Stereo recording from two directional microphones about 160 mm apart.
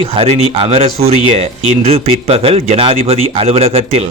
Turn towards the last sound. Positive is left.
turn(degrees=-40)  # may be behind; listen again after turning